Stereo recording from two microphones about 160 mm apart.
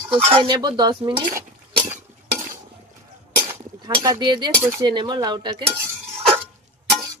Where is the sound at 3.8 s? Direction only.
25° right (ahead or behind).